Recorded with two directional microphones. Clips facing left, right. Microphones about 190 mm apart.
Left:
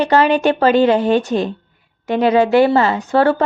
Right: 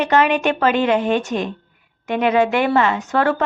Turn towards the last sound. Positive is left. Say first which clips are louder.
# left 4 dB
turn(degrees=30)  # may be behind; listen again after turning